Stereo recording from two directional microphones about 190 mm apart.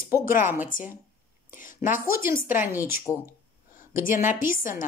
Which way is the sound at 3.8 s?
45° left (ahead or behind).